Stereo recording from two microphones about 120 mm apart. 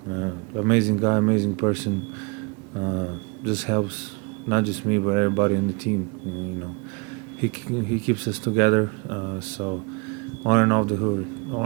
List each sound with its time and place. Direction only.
0.1 s speech: 30° right (ahead or behind)
7.4 s speech: 20° right (ahead or behind)